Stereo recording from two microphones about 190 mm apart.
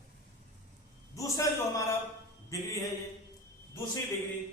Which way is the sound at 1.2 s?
15° left (ahead or behind).